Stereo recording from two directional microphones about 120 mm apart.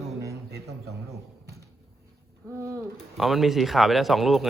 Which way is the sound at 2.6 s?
25° right (ahead or behind).